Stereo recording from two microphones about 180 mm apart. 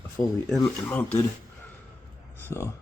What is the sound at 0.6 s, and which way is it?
Speech, 10° left (ahead or behind).